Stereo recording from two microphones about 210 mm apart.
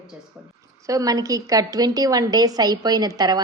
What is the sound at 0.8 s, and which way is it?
A woman's voice, 15° right (ahead or behind).